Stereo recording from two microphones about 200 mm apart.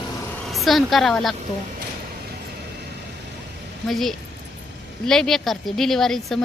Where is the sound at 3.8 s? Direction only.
Centre (ahead or behind).